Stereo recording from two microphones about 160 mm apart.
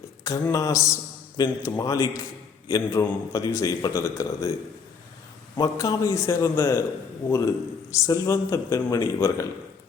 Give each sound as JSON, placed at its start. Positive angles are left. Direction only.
{"t": 0.3, "sound": "a man's voice", "side_deg": 20}
{"t": 5.5, "sound": "a man's voice", "side_deg": 25}